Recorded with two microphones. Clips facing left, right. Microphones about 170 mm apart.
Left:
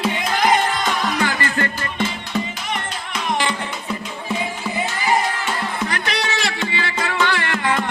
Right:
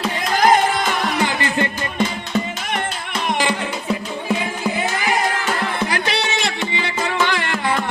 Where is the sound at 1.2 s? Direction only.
20° right (ahead or behind).